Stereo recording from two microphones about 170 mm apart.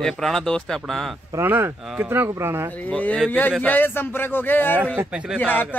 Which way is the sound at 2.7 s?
10° left (ahead or behind).